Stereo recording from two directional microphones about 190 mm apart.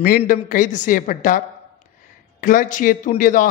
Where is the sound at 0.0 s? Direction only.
50° left (ahead or behind).